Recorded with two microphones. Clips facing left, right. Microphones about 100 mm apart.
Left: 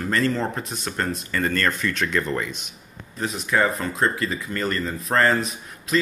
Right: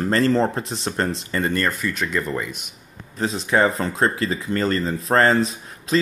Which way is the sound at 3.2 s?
30° right (ahead or behind).